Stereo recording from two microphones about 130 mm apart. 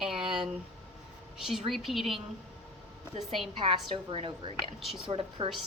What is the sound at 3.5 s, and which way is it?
A woman's voice, 40° right (ahead or behind).